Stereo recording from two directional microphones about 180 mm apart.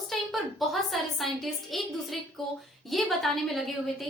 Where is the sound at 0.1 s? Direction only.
Centre (ahead or behind).